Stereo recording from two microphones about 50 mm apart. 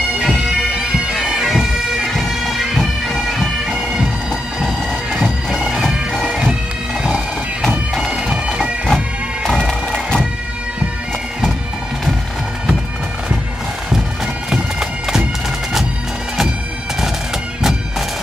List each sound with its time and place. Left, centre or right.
0.3 s bagpipes: centre
0.7 s bagpipes: centre
5.2 s bagpipes: centre
8.2 s bagpipes: centre
8.9 s bagpipes: centre
9.6 s bagpipes: centre
14.5 s bagpipes: centre